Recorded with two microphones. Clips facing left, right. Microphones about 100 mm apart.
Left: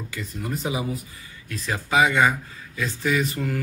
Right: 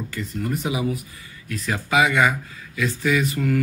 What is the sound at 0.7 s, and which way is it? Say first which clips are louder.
Speech: right 3 dB; 30° left (ahead or behind).